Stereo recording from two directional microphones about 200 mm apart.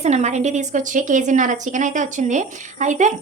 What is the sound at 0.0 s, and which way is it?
A woman's voice, 35° right (ahead or behind).